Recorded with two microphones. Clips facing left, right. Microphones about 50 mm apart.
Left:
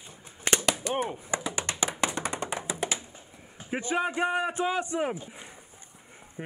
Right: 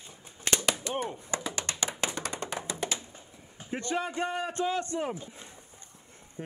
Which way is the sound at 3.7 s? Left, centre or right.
Centre.